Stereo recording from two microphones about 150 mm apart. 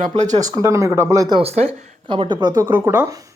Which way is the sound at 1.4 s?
45° right (ahead or behind).